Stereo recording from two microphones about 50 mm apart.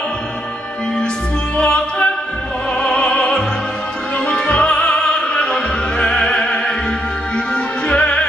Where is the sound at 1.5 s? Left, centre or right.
Centre.